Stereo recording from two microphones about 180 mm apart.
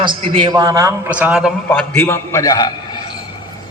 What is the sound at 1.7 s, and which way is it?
A man's voice, 10° left (ahead or behind).